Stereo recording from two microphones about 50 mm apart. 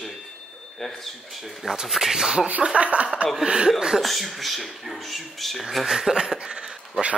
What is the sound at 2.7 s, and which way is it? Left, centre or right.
Speech, right.